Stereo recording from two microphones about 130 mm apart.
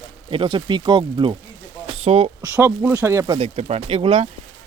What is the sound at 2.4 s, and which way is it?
Speech, 20° right (ahead or behind).